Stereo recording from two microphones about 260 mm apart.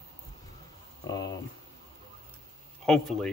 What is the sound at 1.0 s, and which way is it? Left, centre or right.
Speech, centre.